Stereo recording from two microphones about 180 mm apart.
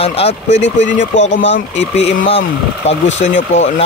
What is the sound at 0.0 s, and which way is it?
Speech, 35° left (ahead or behind).